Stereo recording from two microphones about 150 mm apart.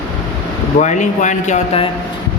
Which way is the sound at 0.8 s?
55° left (ahead or behind).